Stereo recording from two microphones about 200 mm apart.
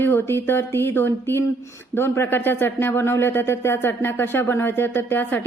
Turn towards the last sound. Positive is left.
turn(degrees=10)  # may be behind; listen again after turning